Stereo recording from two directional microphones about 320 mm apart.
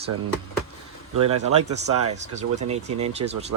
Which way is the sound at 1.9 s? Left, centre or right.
Right.